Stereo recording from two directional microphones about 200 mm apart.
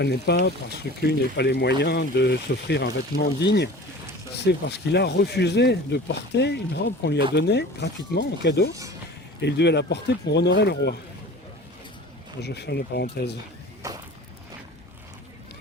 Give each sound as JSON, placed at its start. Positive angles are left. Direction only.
{"t": 0.0, "sound": "speech", "side_deg": 55}
{"t": 12.4, "sound": "speech", "side_deg": 55}
{"t": 13.8, "sound": "a sound", "side_deg": -15}